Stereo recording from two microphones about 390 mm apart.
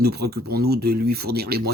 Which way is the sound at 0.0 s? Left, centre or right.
Right.